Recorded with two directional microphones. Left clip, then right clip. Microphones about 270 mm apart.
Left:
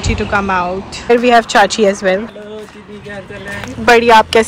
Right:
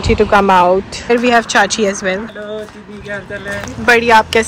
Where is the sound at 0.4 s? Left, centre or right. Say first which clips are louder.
Right 5 dB; right.